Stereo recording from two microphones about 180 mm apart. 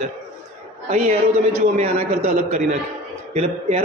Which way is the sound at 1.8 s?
40° right (ahead or behind).